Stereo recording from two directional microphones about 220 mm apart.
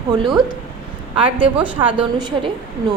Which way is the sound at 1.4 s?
25° right (ahead or behind).